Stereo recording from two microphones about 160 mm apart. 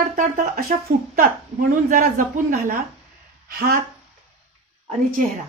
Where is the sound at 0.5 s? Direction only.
65° right (ahead or behind).